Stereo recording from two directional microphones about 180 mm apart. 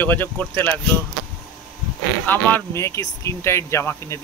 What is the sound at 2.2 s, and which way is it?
Speech, 10° left (ahead or behind).